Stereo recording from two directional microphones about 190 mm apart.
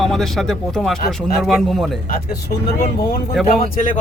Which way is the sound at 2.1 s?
50° left (ahead or behind).